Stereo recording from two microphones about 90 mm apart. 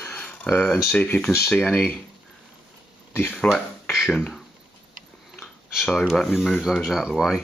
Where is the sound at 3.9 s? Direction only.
Centre (ahead or behind).